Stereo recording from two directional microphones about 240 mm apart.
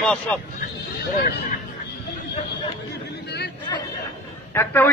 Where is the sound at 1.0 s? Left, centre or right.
Left.